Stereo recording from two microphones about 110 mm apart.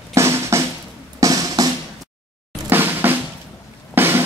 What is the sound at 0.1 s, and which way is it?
Drum, 25° right (ahead or behind).